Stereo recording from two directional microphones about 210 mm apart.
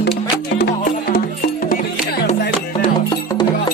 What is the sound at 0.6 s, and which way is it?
Music, 45° left (ahead or behind).